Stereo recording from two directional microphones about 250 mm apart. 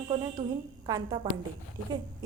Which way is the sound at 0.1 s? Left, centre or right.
Centre.